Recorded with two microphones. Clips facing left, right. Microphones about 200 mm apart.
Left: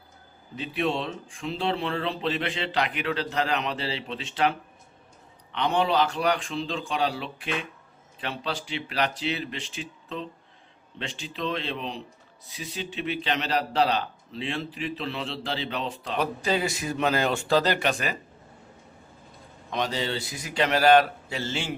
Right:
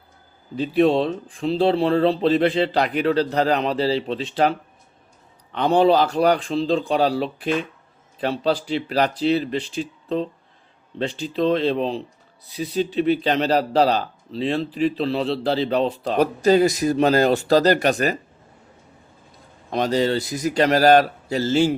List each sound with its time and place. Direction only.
0.5 s speech: 35° right (ahead or behind)
19.7 s speech: 40° right (ahead or behind)